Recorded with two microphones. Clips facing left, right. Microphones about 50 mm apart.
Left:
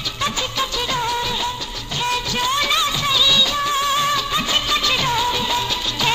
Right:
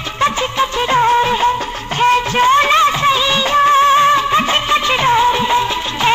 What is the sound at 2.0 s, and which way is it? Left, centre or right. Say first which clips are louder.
Music: right 10 dB; right.